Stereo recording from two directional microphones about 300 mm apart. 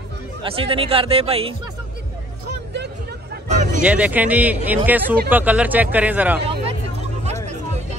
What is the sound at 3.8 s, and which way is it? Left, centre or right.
A man's voice, centre.